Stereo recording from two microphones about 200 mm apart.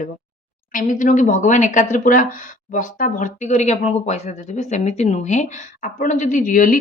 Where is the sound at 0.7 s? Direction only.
40° left (ahead or behind).